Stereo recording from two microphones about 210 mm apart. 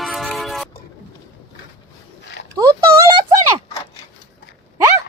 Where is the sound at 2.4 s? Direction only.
55° left (ahead or behind).